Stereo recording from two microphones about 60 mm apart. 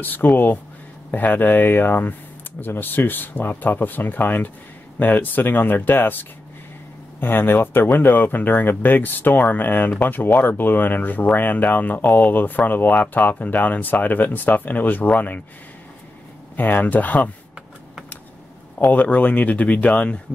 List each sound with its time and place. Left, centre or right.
0.0 s speech: left
16.5 s speech: left
18.8 s speech: left